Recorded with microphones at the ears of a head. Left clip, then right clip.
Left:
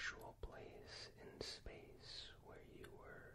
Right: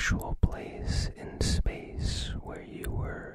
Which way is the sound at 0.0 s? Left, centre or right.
Right.